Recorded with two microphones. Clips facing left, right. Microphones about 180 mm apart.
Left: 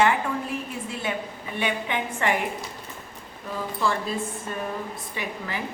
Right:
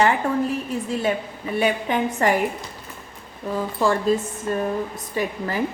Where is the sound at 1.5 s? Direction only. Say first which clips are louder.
Right 6 dB; 40° right (ahead or behind).